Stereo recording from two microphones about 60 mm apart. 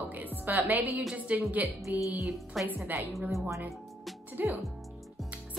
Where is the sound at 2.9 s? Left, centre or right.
Right.